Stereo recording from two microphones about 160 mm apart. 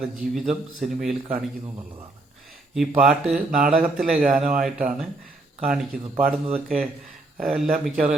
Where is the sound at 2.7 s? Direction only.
5° right (ahead or behind).